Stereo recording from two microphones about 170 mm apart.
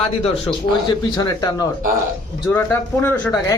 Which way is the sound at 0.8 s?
20° left (ahead or behind).